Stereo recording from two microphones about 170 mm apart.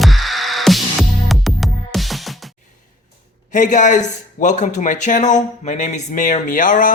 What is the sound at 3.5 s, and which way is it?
Speech, 45° left (ahead or behind).